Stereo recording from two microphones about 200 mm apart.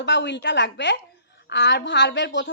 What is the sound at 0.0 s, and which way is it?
A woman's voice, 60° left (ahead or behind).